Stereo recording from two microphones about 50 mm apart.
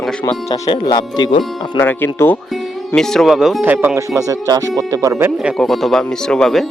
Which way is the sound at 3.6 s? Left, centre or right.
Right.